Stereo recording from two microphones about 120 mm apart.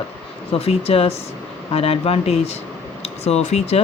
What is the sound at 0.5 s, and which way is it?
A woman's voice, 55° left (ahead or behind).